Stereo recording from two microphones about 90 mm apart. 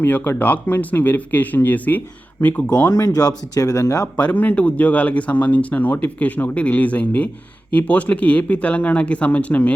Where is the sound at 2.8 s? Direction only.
45° left (ahead or behind).